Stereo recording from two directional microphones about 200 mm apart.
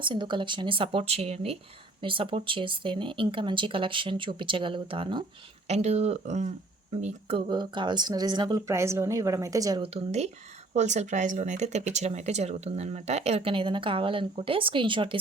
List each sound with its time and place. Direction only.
0.0 s speech: 25° right (ahead or behind)